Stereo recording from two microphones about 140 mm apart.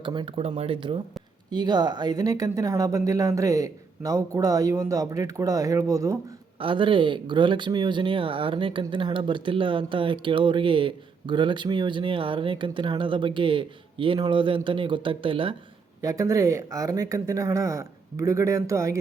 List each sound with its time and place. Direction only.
0.0 s speech: 35° right (ahead or behind)
6.6 s speech: 35° right (ahead or behind)
16.0 s speech: 25° right (ahead or behind)